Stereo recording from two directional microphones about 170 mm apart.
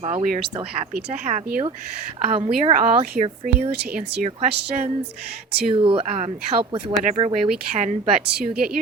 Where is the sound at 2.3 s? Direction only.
35° right (ahead or behind).